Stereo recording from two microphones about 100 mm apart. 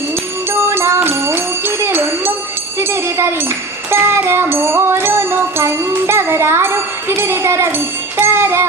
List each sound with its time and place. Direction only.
0.5 s music: 25° right (ahead or behind)
8.2 s jingle bell: 25° right (ahead or behind)